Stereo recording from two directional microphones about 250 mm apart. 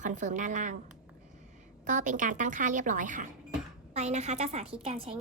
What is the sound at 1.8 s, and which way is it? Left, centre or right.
A woman's voice, right.